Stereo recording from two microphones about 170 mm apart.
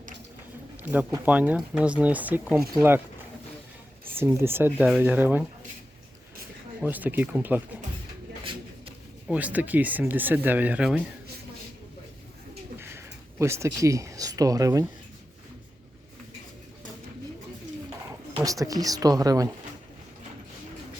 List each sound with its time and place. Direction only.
0.8 s speech: 10° right (ahead or behind)
4.0 s speech: 15° right (ahead or behind)
6.8 s speech: 10° right (ahead or behind)
9.2 s speech: 5° right (ahead or behind)
12.8 s a sound: 15° right (ahead or behind)
18.4 s speech: 20° right (ahead or behind)